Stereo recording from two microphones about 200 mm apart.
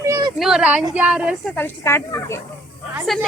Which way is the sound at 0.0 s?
15° right (ahead or behind).